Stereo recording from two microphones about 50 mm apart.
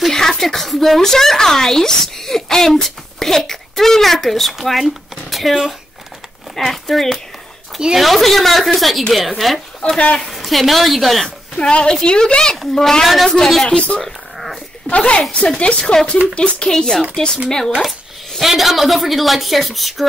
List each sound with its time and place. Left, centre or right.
0.0 s speech: centre
9.8 s a woman's voice: left
10.2 s speech: centre
11.2 s a woman's voice: centre
14.0 s a sound: centre
14.9 s a woman's voice: left
15.8 s a woman's voice: centre
18.4 s speech: centre